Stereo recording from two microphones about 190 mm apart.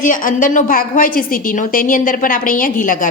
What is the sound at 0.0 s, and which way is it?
A woman's voice, 45° left (ahead or behind).